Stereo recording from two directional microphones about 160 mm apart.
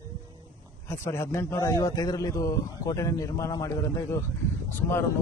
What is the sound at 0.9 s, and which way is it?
Speech, 15° left (ahead or behind).